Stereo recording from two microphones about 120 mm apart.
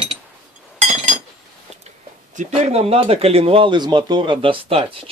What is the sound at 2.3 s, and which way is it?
Speech, 70° right (ahead or behind).